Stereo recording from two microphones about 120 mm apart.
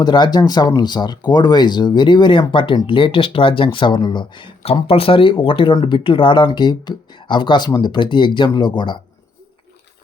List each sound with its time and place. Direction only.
0.0 s speech: 35° left (ahead or behind)